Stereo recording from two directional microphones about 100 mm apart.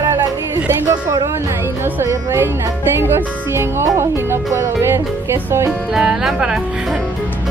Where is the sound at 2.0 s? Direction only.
25° right (ahead or behind).